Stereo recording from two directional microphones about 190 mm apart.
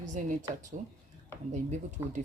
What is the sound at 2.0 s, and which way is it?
Speech, 15° right (ahead or behind).